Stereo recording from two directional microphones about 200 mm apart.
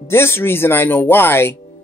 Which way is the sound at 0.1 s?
10° left (ahead or behind).